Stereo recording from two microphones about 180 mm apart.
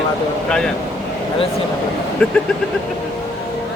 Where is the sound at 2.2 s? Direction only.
10° left (ahead or behind).